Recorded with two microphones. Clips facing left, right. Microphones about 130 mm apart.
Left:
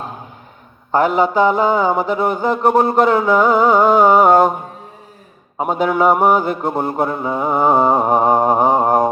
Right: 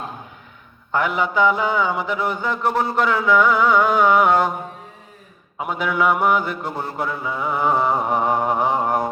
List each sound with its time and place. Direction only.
0.9 s mantra: 40° left (ahead or behind)
5.5 s mantra: 40° left (ahead or behind)